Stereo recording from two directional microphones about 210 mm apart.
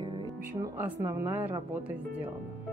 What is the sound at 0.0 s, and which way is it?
Music, 20° right (ahead or behind).